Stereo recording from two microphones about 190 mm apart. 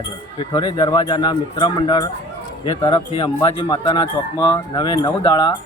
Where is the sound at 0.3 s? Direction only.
25° left (ahead or behind).